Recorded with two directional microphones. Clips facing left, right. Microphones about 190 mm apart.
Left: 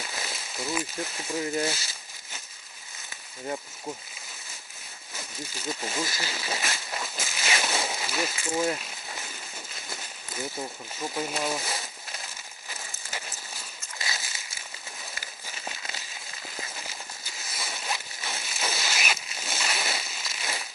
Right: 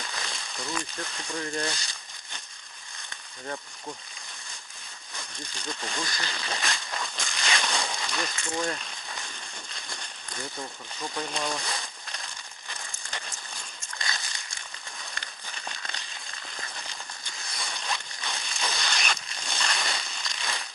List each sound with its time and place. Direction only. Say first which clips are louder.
0.0 s a sound: left 1 dB; 5° left (ahead or behind)
1.5 s speech: left 3 dB; 5° left (ahead or behind)
3.4 s speech: left 3 dB; 20° left (ahead or behind)
5.1 s speech: left 3 dB; 5° left (ahead or behind)
7.0 s a sound: even; 5° left (ahead or behind)
10.9 s speech: left 2 dB; 5° left (ahead or behind)
12.6 s a sound: left 1 dB; 5° left (ahead or behind)
15.1 s crumpling: even; 5° left (ahead or behind)
16.6 s zipper: left 2 dB; 5° left (ahead or behind)